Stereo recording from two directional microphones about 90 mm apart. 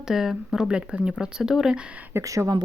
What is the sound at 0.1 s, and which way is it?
Speech, 5° right (ahead or behind).